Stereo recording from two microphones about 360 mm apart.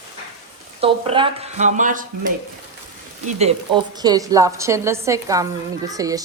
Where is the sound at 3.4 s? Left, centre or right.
Centre.